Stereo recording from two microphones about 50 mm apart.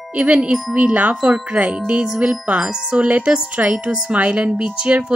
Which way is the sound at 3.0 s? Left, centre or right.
Right.